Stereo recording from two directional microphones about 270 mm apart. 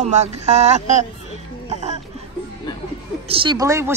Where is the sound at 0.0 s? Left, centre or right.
Right.